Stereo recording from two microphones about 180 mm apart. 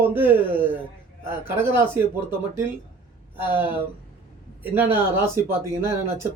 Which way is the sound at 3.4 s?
10° right (ahead or behind).